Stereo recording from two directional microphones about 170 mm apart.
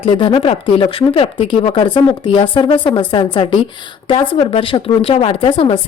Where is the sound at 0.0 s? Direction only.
30° left (ahead or behind).